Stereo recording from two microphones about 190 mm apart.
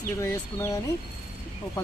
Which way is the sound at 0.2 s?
15° left (ahead or behind).